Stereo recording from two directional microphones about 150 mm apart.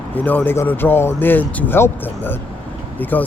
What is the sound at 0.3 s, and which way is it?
Speech, 10° left (ahead or behind).